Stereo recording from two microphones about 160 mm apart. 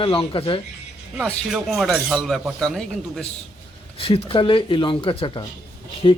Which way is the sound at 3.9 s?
35° left (ahead or behind).